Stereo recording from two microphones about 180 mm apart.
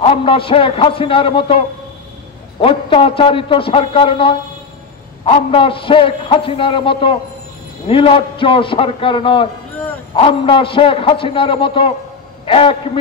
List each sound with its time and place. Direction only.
0.0 s a man's voice: 30° left (ahead or behind)
2.6 s a man's voice: 30° left (ahead or behind)